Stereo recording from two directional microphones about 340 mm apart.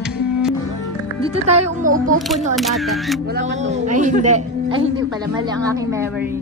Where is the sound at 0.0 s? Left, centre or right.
Centre.